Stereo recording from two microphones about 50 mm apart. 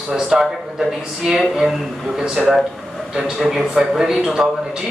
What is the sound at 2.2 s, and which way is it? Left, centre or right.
Speech, centre.